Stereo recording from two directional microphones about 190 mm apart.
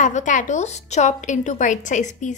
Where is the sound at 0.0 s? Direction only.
40° left (ahead or behind).